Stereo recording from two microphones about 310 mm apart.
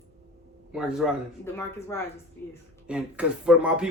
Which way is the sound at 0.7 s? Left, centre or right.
Centre.